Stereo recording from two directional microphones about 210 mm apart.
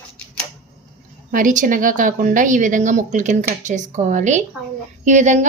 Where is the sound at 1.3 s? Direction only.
40° right (ahead or behind).